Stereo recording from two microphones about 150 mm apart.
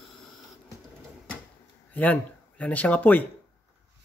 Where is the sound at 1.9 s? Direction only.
10° left (ahead or behind).